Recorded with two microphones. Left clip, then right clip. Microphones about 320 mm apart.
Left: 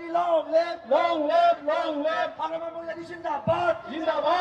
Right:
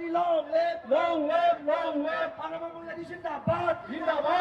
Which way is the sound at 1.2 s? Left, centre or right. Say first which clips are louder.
Left 4 dB; left.